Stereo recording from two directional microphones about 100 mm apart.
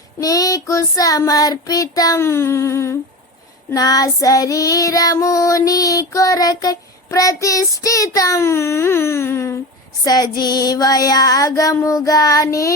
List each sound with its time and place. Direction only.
0.2 s child singing: 35° left (ahead or behind)
10.0 s child singing: 40° left (ahead or behind)